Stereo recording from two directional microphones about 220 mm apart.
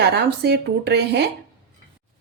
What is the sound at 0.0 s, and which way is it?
A woman's voice, 50° right (ahead or behind).